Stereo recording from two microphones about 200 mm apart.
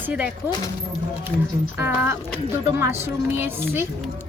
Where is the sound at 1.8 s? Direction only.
10° right (ahead or behind).